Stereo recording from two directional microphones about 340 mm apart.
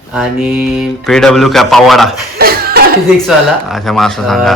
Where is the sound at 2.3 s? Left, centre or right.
Right.